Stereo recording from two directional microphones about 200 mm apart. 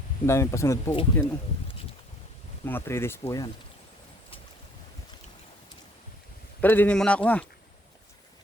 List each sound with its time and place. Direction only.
0.3 s speech: 15° left (ahead or behind)
0.9 s speech: 25° left (ahead or behind)
2.6 s speech: 10° left (ahead or behind)
6.6 s speech: 10° left (ahead or behind)